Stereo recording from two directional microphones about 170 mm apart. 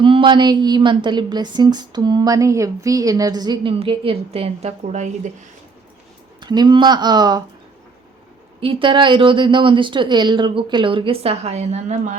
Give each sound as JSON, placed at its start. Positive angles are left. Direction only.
{"t": 0.0, "sound": "a woman's voice", "side_deg": -30}
{"t": 6.4, "sound": "a woman's voice", "side_deg": -25}
{"t": 8.6, "sound": "a woman's voice", "side_deg": -30}